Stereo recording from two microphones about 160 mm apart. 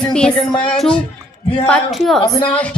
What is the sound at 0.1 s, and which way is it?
A woman's voice, 5° left (ahead or behind).